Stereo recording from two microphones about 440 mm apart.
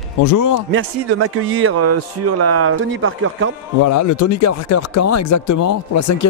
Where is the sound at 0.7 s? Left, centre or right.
Right.